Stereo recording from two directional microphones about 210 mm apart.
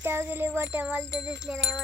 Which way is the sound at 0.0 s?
10° right (ahead or behind).